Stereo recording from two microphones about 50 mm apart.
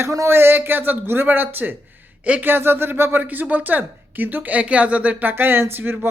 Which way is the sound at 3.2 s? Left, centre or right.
Right.